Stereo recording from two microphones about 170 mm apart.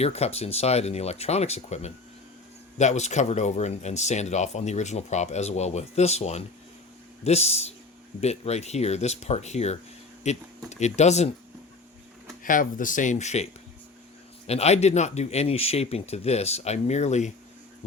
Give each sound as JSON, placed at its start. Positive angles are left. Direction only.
{"t": 0.0, "sound": "speech", "side_deg": 40}
{"t": 12.4, "sound": "speech", "side_deg": 50}